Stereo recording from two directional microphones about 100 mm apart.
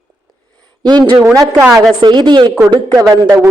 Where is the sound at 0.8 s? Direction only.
45° right (ahead or behind).